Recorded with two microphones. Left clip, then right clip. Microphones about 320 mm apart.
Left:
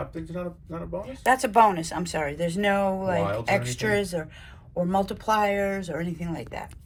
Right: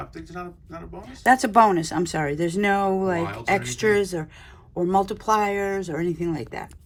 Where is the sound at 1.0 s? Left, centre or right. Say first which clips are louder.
Right 4 dB; right.